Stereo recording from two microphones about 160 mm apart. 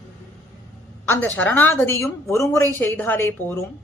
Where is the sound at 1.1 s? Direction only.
10° left (ahead or behind).